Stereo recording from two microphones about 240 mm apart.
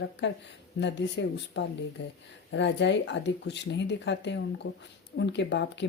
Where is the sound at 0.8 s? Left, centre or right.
Left.